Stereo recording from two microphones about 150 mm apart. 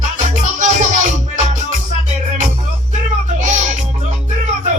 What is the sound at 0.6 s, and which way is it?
Music, 55° right (ahead or behind).